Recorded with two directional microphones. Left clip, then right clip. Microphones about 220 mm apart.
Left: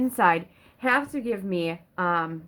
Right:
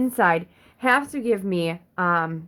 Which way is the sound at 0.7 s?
40° right (ahead or behind).